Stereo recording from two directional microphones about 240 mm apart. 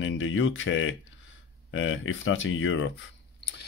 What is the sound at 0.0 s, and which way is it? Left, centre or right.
Speech, left.